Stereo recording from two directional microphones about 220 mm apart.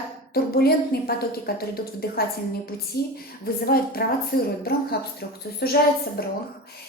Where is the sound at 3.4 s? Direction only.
45° left (ahead or behind).